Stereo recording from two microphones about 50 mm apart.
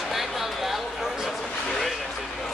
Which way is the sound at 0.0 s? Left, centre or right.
Centre.